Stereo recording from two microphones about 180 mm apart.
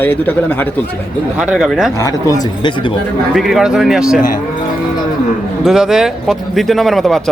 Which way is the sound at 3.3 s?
Centre (ahead or behind).